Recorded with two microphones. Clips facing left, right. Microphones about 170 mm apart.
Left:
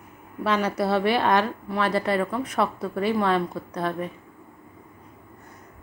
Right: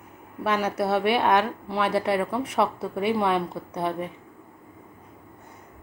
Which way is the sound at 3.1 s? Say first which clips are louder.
Left 1 dB; 15° right (ahead or behind).